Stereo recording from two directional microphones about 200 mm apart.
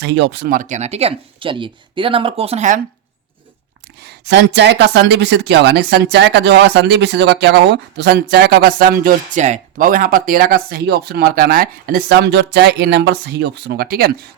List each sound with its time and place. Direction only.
0.0 s speech: 60° right (ahead or behind); by 2.8 s 35° right (ahead or behind)
4.0 s speech: 55° right (ahead or behind)